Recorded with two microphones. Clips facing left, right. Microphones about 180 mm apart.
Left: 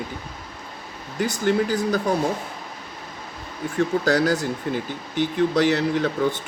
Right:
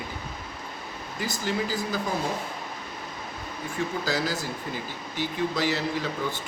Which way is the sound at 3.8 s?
60° left (ahead or behind).